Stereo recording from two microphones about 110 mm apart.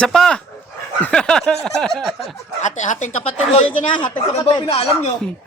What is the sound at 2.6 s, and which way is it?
Speech, 90° left.